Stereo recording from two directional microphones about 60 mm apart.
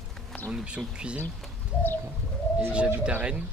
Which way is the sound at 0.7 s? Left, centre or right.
Centre.